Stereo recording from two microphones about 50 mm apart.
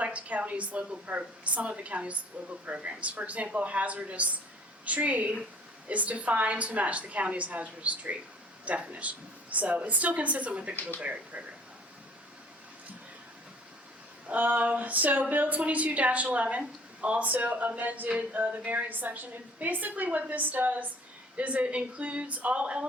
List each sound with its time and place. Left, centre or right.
0.0 s a woman's voice: right
14.3 s a woman's voice: right